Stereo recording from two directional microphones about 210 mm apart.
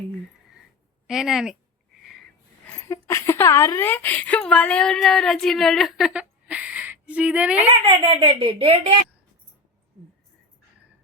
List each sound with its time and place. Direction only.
1.0 s speech: centre (ahead or behind)
2.8 s speech: 15° left (ahead or behind); by 7.6 s 5° right (ahead or behind)
7.6 s speech: 30° right (ahead or behind)